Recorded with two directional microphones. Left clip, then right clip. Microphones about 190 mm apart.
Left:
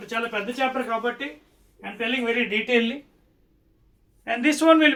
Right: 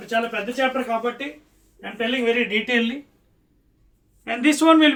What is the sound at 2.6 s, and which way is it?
Speech, 15° left (ahead or behind).